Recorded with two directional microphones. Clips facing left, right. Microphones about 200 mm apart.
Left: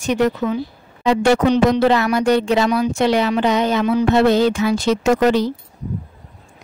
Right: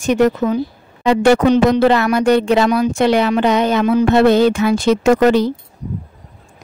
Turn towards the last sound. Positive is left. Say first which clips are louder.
# right 3 dB
turn(degrees=-55)  # may be behind; listen again after turning